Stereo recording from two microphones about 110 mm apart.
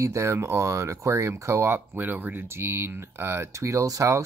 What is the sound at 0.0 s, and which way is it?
Speech, 25° right (ahead or behind).